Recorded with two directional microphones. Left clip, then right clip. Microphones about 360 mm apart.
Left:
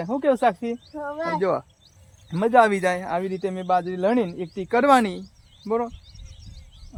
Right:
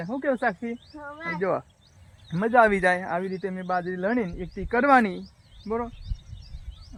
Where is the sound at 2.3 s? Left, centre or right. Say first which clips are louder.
Left 2 dB; centre.